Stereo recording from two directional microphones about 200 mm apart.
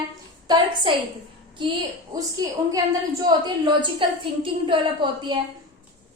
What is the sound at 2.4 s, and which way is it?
A woman's voice, 20° right (ahead or behind).